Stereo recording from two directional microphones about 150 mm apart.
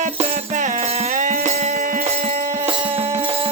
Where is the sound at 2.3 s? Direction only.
50° right (ahead or behind).